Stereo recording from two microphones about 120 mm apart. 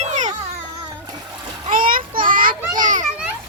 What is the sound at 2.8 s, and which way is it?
Children playing, 90° right.